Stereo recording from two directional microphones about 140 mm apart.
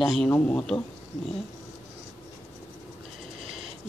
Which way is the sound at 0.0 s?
Centre (ahead or behind).